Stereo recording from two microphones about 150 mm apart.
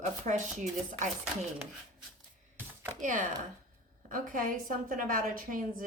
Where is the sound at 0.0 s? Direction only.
50° right (ahead or behind).